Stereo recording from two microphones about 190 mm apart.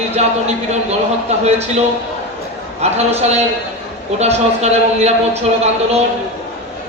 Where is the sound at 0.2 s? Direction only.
35° right (ahead or behind).